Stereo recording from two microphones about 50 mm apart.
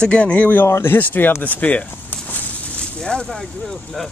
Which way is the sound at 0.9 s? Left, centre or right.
Left.